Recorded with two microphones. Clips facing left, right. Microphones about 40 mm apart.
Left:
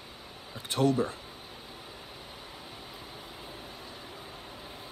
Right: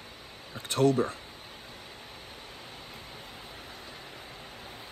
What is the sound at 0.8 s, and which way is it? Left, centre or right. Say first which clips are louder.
Speech: right 2 dB; right.